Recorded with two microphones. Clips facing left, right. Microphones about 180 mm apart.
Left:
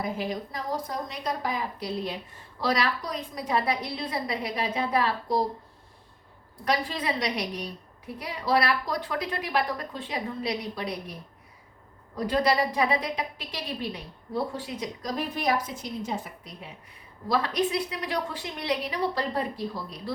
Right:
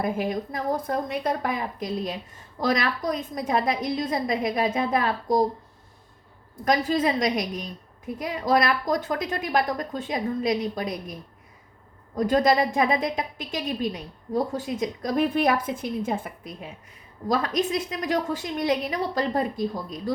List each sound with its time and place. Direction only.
0.0 s a woman's voice: 50° right (ahead or behind)
6.7 s a woman's voice: 45° right (ahead or behind)
12.1 s a woman's voice: 45° right (ahead or behind)